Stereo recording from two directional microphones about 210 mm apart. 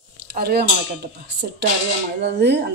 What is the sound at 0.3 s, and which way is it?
Speech, 50° right (ahead or behind).